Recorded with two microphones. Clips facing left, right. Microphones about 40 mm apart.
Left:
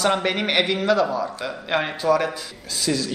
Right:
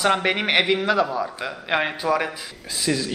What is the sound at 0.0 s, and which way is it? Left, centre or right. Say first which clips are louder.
Speech: right 1 dB; centre.